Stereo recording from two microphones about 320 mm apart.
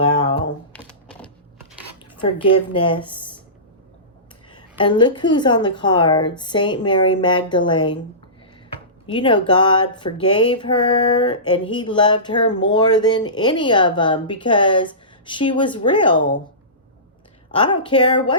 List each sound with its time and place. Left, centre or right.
0.7 s a sound: centre
2.2 s a woman's voice: centre
3.1 s a sound: centre
4.5 s a woman's voice: centre
9.0 s a woman's voice: centre
17.5 s a woman's voice: centre